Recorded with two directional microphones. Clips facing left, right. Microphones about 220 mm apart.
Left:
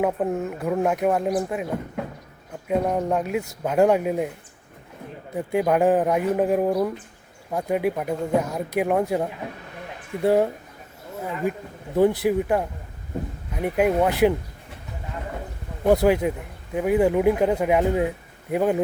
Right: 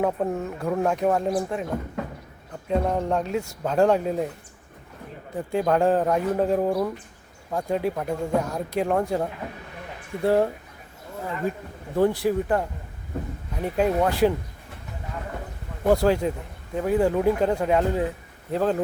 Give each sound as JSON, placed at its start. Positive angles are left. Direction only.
{"t": 0.0, "sound": "speech", "side_deg": 5}
{"t": 2.6, "sound": "speech", "side_deg": 5}
{"t": 5.3, "sound": "speech", "side_deg": 10}
{"t": 11.9, "sound": "speech", "side_deg": 20}
{"t": 15.8, "sound": "speech", "side_deg": 10}